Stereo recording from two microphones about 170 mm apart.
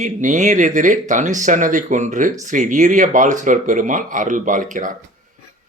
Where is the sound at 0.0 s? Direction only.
45° right (ahead or behind).